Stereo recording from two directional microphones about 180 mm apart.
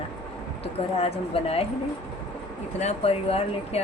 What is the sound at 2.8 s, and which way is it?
Speech, 35° left (ahead or behind).